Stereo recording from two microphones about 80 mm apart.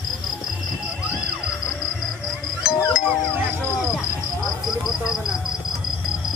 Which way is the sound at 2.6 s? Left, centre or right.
Centre.